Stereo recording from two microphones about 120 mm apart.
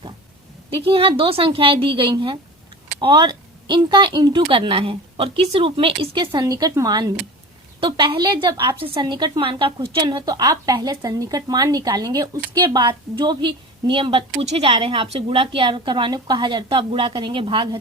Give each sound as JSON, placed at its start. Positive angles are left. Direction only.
{"t": 0.7, "sound": "a woman's voice", "side_deg": -45}
{"t": 6.4, "sound": "a woman's voice", "side_deg": -30}